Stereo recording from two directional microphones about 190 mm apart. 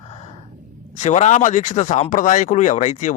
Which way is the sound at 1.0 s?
40° left (ahead or behind).